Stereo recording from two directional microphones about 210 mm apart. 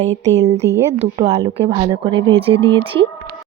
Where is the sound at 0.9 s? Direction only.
30° right (ahead or behind).